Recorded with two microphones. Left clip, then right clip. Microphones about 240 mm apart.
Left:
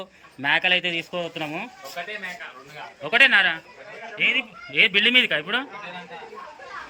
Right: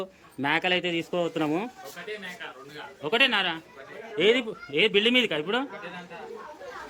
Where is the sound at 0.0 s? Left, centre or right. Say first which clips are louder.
Left 3 dB; centre.